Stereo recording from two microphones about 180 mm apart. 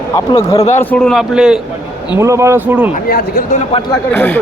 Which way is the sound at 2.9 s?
50° left (ahead or behind).